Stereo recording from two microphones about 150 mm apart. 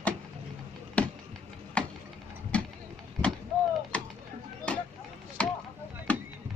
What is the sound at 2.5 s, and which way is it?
Vehicle, 10° left (ahead or behind).